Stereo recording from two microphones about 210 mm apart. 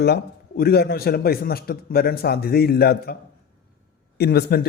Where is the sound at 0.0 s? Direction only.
45° left (ahead or behind).